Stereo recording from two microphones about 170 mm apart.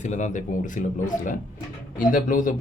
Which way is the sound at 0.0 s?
45° left (ahead or behind).